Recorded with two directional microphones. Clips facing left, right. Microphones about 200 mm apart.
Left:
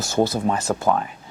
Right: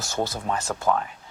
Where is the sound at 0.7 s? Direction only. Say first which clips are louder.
Left 7 dB; 20° left (ahead or behind).